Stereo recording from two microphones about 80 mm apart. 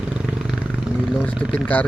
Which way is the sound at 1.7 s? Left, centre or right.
Centre.